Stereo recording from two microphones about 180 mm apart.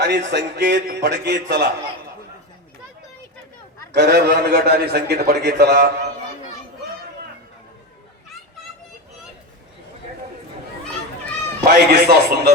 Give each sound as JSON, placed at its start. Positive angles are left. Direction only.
{"t": 0.0, "sound": "a man's voice", "side_deg": -70}
{"t": 3.9, "sound": "a man's voice", "side_deg": -65}
{"t": 11.6, "sound": "a man's voice", "side_deg": -60}